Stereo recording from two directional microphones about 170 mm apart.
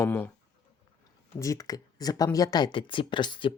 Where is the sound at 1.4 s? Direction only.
20° left (ahead or behind).